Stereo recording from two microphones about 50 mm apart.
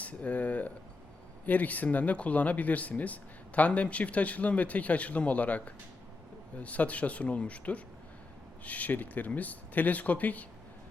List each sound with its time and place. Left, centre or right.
0.0 s speech: left